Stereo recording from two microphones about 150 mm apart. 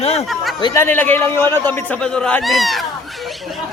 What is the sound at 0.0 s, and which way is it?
Speech, 45° left (ahead or behind).